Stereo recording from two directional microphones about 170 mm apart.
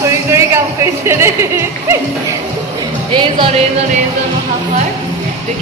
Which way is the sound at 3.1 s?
30° right (ahead or behind).